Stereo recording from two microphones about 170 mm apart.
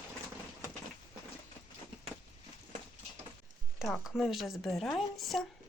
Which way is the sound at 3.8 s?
Centre (ahead or behind).